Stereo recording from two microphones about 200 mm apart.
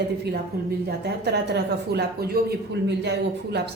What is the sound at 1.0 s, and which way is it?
A woman's voice, 55° right (ahead or behind).